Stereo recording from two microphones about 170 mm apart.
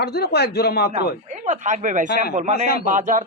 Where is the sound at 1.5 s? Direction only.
45° right (ahead or behind).